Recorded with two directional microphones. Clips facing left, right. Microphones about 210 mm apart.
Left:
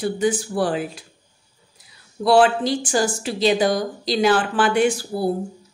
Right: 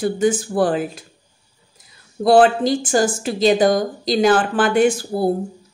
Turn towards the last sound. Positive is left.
turn(degrees=-45)  # may be behind; listen again after turning